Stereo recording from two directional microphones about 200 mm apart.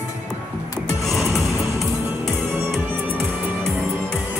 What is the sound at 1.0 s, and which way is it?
Music, centre (ahead or behind).